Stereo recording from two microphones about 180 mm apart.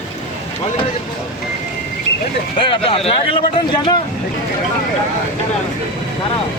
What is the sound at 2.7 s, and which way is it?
Speech, 30° left (ahead or behind).